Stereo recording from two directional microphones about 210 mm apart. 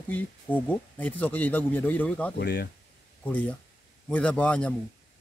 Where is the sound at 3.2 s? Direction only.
5° left (ahead or behind).